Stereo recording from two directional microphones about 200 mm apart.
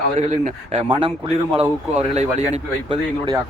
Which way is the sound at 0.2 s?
35° right (ahead or behind).